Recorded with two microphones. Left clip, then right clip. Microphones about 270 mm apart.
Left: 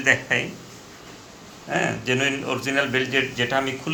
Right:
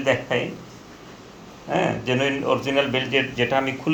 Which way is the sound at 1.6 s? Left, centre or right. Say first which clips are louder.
Right 1 dB; centre.